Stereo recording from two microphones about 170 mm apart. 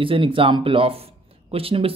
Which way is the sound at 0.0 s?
30° right (ahead or behind).